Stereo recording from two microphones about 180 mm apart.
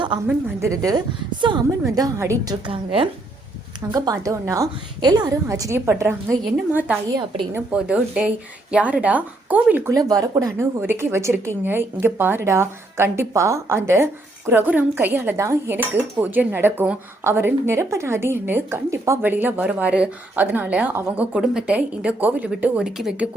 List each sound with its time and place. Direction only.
0.3 s a woman's voice: 15° right (ahead or behind)
3.9 s speech: 20° right (ahead or behind)